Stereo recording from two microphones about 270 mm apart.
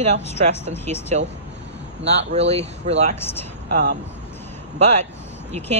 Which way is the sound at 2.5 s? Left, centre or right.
Right.